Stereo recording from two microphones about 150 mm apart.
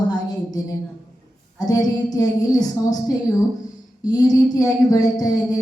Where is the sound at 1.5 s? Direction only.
25° left (ahead or behind).